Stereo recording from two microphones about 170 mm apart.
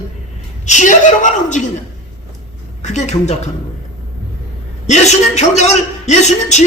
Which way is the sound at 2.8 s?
45° left (ahead or behind).